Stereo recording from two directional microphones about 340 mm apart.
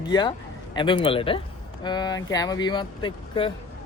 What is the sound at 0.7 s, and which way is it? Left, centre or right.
Speech, centre.